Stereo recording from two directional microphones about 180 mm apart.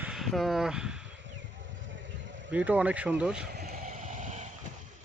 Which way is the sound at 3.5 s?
60° right (ahead or behind).